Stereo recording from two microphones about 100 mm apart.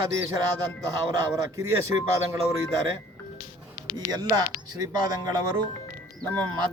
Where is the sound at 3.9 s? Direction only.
40° right (ahead or behind).